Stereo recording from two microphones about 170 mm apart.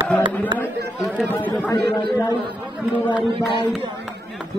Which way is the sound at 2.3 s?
25° right (ahead or behind).